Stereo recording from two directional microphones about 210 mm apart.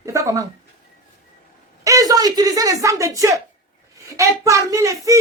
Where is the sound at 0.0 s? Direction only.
15° right (ahead or behind).